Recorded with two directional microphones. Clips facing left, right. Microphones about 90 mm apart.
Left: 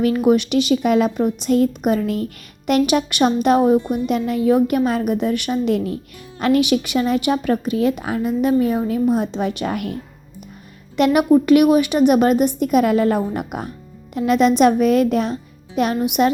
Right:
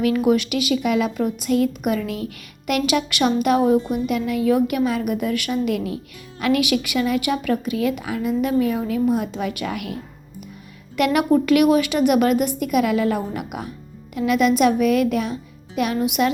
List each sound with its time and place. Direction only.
0.0 s a woman's voice: 30° left (ahead or behind)
1.1 s a woman's voice: 25° left (ahead or behind)
1.5 s a woman's voice: 35° left (ahead or behind)
3.8 s a woman's voice: 15° right (ahead or behind)
4.0 s a woman's voice: 35° left (ahead or behind)
10.9 s a woman's voice: 25° left (ahead or behind)